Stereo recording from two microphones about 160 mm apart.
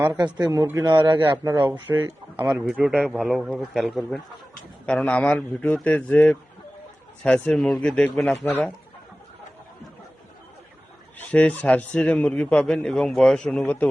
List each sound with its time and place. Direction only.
0.0 s a man's voice: 20° right (ahead or behind)
1.0 s speech: 15° right (ahead or behind)
1.3 s a man's voice: 25° right (ahead or behind)
1.6 s a man's voice: 10° right (ahead or behind); by 8.7 s 10° left (ahead or behind)
11.2 s a man's voice: 10° left (ahead or behind)